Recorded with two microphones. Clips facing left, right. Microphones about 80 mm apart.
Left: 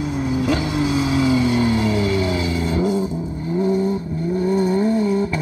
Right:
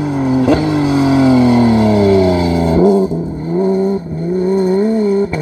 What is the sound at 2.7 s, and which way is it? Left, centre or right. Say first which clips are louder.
Vehicle: right 11 dB; right.